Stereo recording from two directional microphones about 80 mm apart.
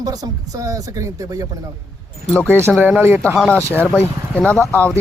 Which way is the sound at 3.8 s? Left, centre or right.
Left.